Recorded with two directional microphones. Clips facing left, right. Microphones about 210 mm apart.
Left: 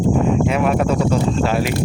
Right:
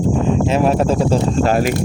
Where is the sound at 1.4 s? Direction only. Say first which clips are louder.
Right 3 dB; 45° right (ahead or behind).